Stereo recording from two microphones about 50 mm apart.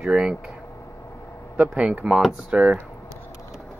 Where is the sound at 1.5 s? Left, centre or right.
Right.